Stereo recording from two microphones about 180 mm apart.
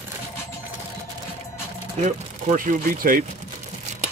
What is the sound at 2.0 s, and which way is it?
Speech, 40° right (ahead or behind).